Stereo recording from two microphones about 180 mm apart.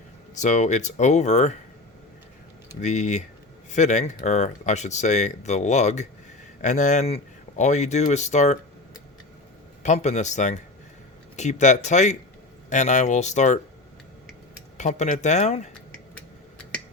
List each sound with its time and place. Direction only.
0.3 s speech: 40° left (ahead or behind)
2.8 s speech: 40° left (ahead or behind)
9.8 s speech: 40° left (ahead or behind)
14.8 s speech: 40° left (ahead or behind)